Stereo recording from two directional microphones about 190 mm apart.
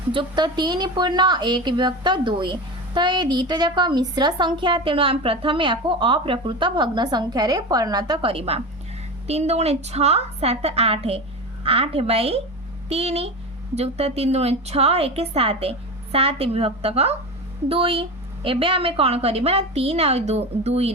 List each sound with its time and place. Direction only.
0.1 s a woman's voice: 25° right (ahead or behind)